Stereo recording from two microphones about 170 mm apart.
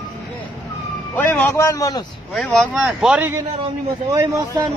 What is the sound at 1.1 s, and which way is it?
Speech, 10° left (ahead or behind).